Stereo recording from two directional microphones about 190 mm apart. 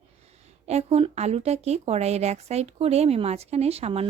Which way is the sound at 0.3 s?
35° right (ahead or behind).